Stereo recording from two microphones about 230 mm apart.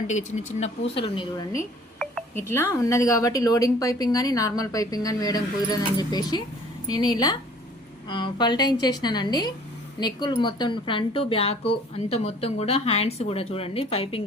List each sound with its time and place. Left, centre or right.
0.1 s a woman's voice: left